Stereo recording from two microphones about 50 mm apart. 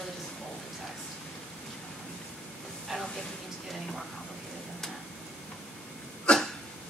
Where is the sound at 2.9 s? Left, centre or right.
Centre.